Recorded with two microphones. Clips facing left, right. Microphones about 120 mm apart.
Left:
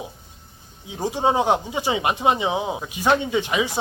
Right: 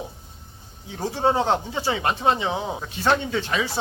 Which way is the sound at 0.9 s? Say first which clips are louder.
Left 1 dB; 15° left (ahead or behind).